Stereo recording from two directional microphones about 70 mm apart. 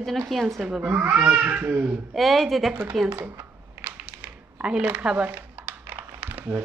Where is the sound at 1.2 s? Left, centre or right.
Centre.